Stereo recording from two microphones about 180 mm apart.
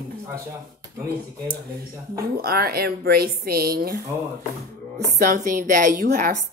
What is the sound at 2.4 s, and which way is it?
A woman's voice, 55° right (ahead or behind).